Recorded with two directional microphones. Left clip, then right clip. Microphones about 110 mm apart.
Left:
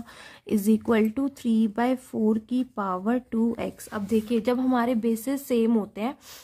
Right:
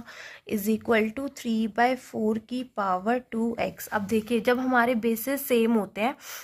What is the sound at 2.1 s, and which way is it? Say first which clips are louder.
A woman's voice: left 2 dB; 20° left (ahead or behind).